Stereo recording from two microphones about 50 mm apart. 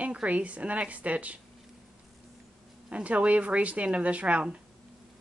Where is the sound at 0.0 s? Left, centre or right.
Right.